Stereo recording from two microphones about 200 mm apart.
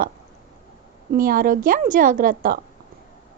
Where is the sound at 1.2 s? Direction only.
45° right (ahead or behind).